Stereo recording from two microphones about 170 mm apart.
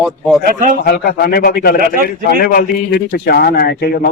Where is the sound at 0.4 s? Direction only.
50° right (ahead or behind).